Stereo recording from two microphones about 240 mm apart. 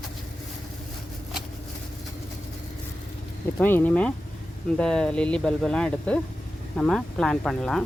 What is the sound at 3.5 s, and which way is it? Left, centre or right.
Speech, centre.